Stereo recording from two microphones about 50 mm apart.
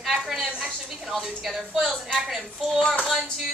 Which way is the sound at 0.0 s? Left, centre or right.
Centre.